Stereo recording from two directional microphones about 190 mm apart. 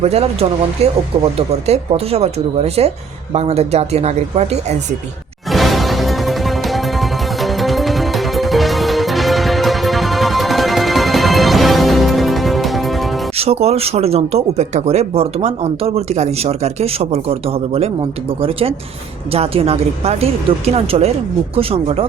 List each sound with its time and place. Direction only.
0.0 s speech: 30° right (ahead or behind)
5.5 s music: centre (ahead or behind)
13.3 s speech: 30° right (ahead or behind)